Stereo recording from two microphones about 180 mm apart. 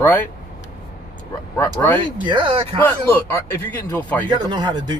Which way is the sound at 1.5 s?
15° left (ahead or behind).